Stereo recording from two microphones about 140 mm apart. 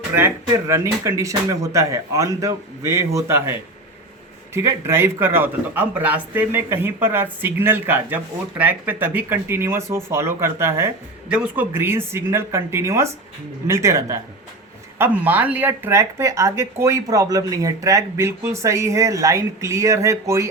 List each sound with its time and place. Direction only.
0.7 s speech: 20° right (ahead or behind)
4.5 s speech: 20° right (ahead or behind)